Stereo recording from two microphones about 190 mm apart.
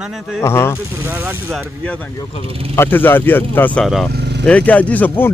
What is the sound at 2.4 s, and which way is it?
Speech, 30° right (ahead or behind).